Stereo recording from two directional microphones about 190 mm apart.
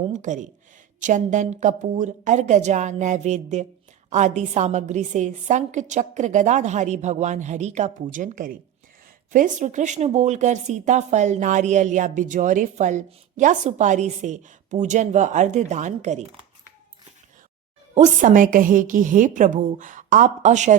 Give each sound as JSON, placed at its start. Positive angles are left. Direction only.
{"t": 0.1, "sound": "speech", "side_deg": -40}
{"t": 17.9, "sound": "a woman's voice", "side_deg": -40}